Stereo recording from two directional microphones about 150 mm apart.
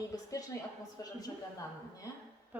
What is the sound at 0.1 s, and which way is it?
A woman's voice, 20° left (ahead or behind).